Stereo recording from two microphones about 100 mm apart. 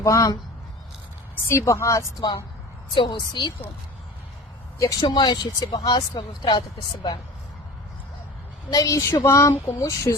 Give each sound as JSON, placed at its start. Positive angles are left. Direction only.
{"t": 0.0, "sound": "speech", "side_deg": 35}
{"t": 1.5, "sound": "speech", "side_deg": 30}
{"t": 2.9, "sound": "speech", "side_deg": 55}
{"t": 4.8, "sound": "speech", "side_deg": 35}
{"t": 5.0, "sound": "speech", "side_deg": 50}
{"t": 8.7, "sound": "speech", "side_deg": 35}